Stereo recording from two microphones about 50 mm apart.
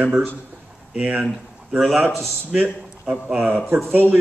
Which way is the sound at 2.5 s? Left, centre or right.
Right.